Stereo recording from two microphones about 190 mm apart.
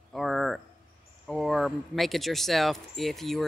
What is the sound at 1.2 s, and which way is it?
Speech, centre (ahead or behind).